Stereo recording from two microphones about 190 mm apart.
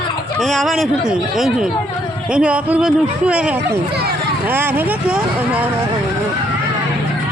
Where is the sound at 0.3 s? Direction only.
Centre (ahead or behind).